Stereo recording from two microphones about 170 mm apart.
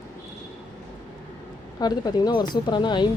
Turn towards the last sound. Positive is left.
turn(degrees=25)  # may be behind; listen again after turning